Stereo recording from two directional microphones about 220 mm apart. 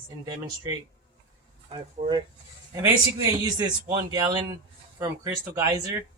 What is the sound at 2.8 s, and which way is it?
A man's voice, 15° right (ahead or behind).